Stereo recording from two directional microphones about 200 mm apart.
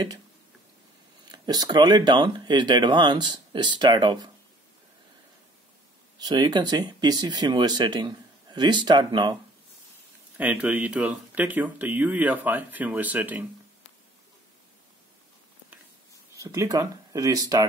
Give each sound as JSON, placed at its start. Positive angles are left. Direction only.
{"t": 1.3, "sound": "speech", "side_deg": -20}
{"t": 6.1, "sound": "speech", "side_deg": -20}
{"t": 10.3, "sound": "speech", "side_deg": -10}
{"t": 16.3, "sound": "speech", "side_deg": -15}